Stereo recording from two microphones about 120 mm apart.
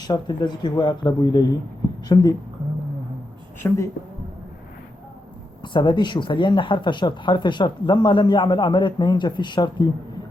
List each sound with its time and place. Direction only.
0.0 s speech: 35° left (ahead or behind)
3.6 s a woman's voice: 20° left (ahead or behind)
5.6 s speech: 40° left (ahead or behind)